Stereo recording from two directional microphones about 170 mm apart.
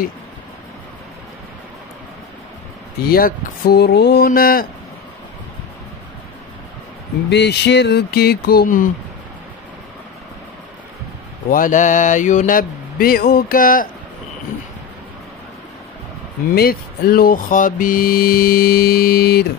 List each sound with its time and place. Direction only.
3.1 s speech: 60° left (ahead or behind)
7.2 s a sound: 90° left; by 8.9 s 50° left (ahead or behind)
11.5 s mantra: 50° left (ahead or behind)
16.5 s speech: 65° left (ahead or behind)